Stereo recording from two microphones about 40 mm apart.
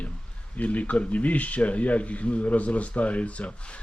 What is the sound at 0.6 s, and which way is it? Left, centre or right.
Speech, left.